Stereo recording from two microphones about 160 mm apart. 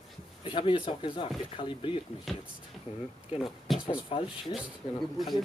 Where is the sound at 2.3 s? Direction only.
Centre (ahead or behind).